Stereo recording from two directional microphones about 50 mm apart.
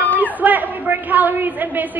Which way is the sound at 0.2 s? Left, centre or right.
Right.